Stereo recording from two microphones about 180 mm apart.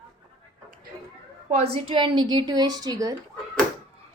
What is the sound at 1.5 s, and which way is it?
A woman's voice, 35° right (ahead or behind).